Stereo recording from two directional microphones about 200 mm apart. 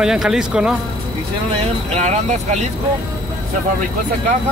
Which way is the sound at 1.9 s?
35° right (ahead or behind).